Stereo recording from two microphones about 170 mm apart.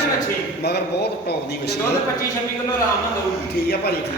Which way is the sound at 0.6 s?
75° left (ahead or behind).